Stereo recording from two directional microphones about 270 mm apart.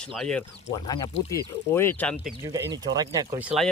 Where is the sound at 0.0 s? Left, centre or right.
Centre.